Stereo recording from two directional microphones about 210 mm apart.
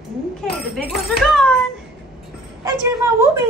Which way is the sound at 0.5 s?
Centre (ahead or behind).